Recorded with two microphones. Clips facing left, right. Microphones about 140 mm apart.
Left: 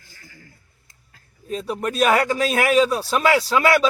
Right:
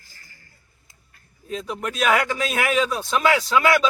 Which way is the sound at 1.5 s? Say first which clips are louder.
Left 3 dB; 35° left (ahead or behind).